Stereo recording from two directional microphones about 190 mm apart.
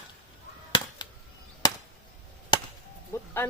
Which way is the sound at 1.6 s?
20° left (ahead or behind).